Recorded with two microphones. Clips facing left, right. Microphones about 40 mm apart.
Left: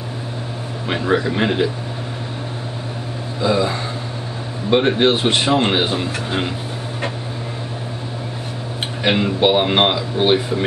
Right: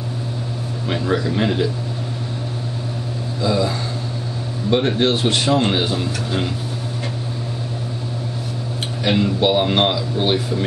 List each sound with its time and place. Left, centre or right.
0.8 s a man's voice: left
3.3 s a man's voice: left
9.0 s a man's voice: left